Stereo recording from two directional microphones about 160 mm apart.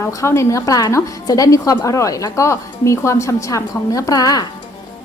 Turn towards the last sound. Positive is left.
turn(degrees=25)  # may be behind; listen again after turning